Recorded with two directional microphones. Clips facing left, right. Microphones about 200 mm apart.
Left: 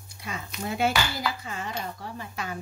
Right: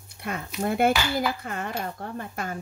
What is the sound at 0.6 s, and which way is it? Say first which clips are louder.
Speech: right 4 dB; 55° right (ahead or behind).